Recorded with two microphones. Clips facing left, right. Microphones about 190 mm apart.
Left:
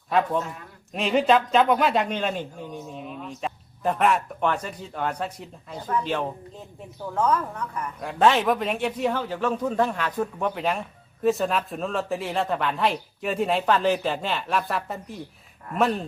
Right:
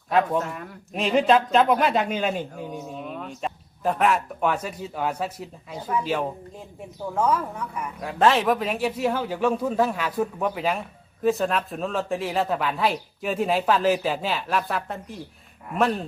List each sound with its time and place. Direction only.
0.9 s speech: centre (ahead or behind)
2.6 s speech: 50° right (ahead or behind)
3.2 s speech: centre (ahead or behind)